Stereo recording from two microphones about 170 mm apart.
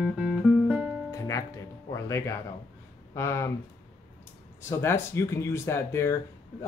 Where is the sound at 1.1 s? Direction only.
20° left (ahead or behind).